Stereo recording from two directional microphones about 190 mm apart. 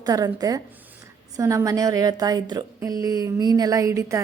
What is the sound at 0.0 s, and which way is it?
A woman's voice, 20° right (ahead or behind).